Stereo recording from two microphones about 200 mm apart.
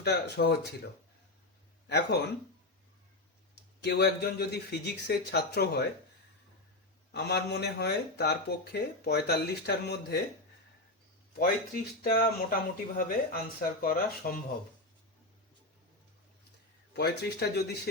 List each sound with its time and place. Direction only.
0.0 s a man's voice: 55° left (ahead or behind)
1.9 s a man's voice: 55° left (ahead or behind)
3.5 s a man's voice: 55° left (ahead or behind)
7.1 s a man's voice: 55° left (ahead or behind)
11.3 s speech: 45° left (ahead or behind)
16.9 s a man's voice: 55° left (ahead or behind)